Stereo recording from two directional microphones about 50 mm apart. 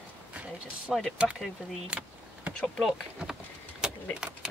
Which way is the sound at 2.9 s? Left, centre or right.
Centre.